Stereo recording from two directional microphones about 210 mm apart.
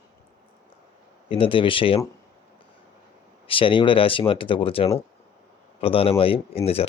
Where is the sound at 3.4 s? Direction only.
25° left (ahead or behind).